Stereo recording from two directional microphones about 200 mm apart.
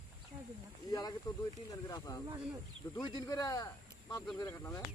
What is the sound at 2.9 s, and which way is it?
Speech, 20° left (ahead or behind).